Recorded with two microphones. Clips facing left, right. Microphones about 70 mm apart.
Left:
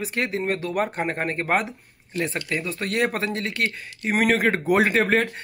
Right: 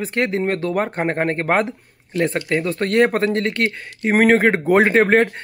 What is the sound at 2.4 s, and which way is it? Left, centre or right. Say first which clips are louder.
Speech: right 7 dB; right.